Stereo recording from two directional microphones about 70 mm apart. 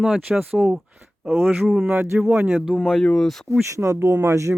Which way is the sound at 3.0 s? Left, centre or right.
Centre.